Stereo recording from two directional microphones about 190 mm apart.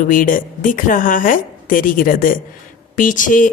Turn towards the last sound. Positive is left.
turn(degrees=45)  # may be behind; listen again after turning